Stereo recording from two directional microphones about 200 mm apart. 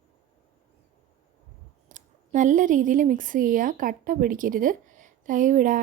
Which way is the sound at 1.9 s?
40° right (ahead or behind).